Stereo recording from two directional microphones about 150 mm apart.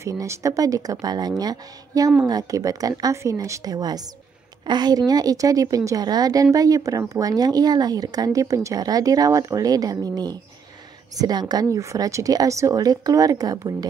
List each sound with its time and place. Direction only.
0.0 s a woman's voice: 20° right (ahead or behind)